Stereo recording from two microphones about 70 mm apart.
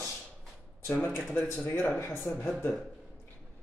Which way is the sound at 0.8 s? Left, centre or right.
Left.